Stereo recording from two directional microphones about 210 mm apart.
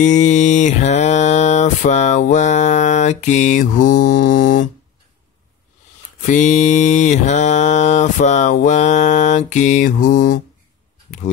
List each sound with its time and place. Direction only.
0.0 s mantra: 35° left (ahead or behind)
6.2 s mantra: 35° left (ahead or behind)